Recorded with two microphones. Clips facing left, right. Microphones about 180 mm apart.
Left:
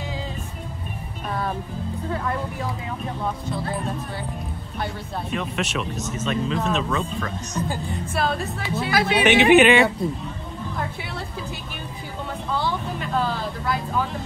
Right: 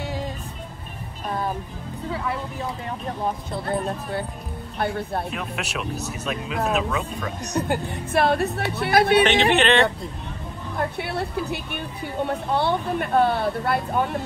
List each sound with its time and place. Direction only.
2.0 s speech: 5° right (ahead or behind)
4.7 s speech: 60° right (ahead or behind)
5.3 s speech: centre (ahead or behind)
7.6 s speech: 65° right (ahead or behind)
9.2 s speech: 10° left (ahead or behind)
10.8 s speech: 60° right (ahead or behind)